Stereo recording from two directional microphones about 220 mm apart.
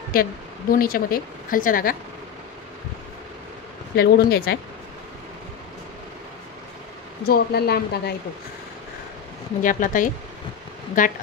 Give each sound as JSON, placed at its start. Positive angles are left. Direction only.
{"t": 0.1, "sound": "speech", "side_deg": 40}
{"t": 3.9, "sound": "a woman's voice", "side_deg": 45}
{"t": 7.2, "sound": "a woman's voice", "side_deg": 45}
{"t": 9.6, "sound": "speech", "side_deg": 35}